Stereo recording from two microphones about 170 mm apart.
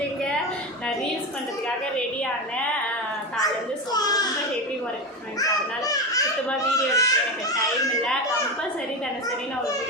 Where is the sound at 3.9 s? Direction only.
20° left (ahead or behind).